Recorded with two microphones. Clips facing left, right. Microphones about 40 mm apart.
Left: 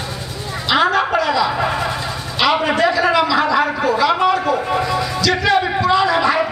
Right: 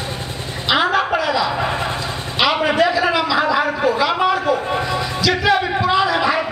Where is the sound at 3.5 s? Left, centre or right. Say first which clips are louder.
Left 1 dB; centre.